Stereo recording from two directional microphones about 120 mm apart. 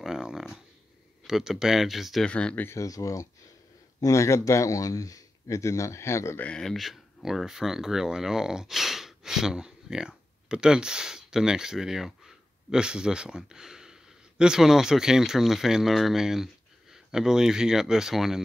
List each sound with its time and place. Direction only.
0.0 s a sound: 5° right (ahead or behind)
1.2 s speech: 5° right (ahead or behind)
2.2 s speech: 10° left (ahead or behind)
6.4 s speech: 5° left (ahead or behind)